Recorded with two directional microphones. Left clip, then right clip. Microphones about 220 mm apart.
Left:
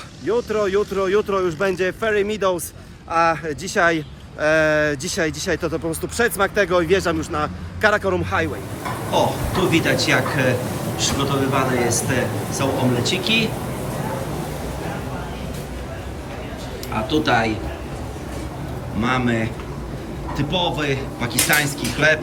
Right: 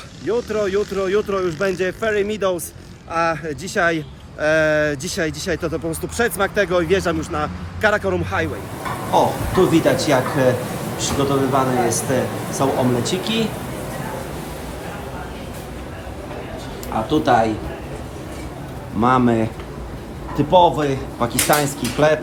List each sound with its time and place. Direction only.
0.4 s speech: 5° left (ahead or behind)
9.1 s speech: 10° right (ahead or behind)
11.5 s speech: 10° right (ahead or behind)
17.1 s speech: 10° right (ahead or behind)
19.0 s speech: 15° right (ahead or behind)